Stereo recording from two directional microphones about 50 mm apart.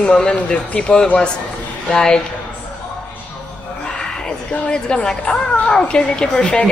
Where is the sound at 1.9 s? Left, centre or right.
Centre.